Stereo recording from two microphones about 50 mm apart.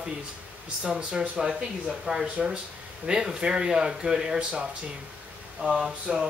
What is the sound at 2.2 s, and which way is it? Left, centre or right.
Speech, right.